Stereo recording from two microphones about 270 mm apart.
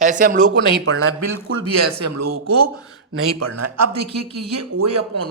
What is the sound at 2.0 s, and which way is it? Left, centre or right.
Speech, right.